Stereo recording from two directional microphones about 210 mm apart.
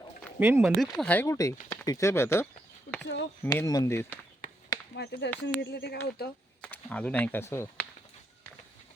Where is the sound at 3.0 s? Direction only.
55° left (ahead or behind).